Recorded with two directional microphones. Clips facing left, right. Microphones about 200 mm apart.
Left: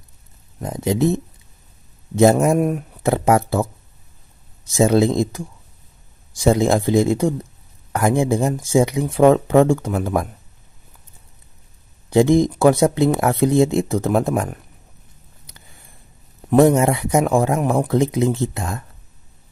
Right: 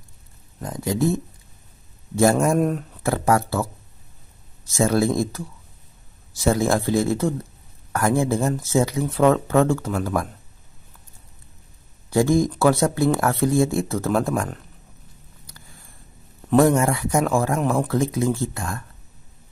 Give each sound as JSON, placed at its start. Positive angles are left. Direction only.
{"t": 0.6, "sound": "speech", "side_deg": 20}
{"t": 12.1, "sound": "speech", "side_deg": 20}
{"t": 16.4, "sound": "speech", "side_deg": 20}